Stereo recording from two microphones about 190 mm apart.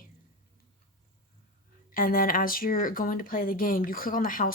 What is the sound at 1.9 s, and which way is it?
Speech, 45° left (ahead or behind).